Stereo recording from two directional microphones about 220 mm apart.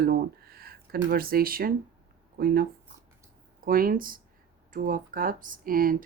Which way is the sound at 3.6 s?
40° right (ahead or behind).